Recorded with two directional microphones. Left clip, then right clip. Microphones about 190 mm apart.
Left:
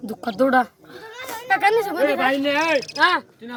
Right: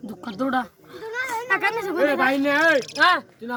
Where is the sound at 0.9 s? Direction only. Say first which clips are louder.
Right 6 dB; 35° left (ahead or behind).